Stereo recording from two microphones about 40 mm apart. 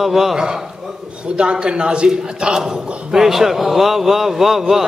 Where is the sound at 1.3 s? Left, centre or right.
Right; by 4.8 s centre.